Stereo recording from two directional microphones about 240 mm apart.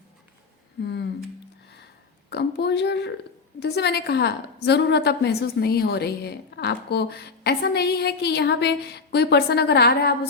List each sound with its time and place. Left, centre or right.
0.8 s speech: left
2.3 s a sound: left
3.6 s a woman's voice: left